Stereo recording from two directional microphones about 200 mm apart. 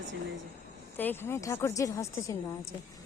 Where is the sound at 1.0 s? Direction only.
10° left (ahead or behind).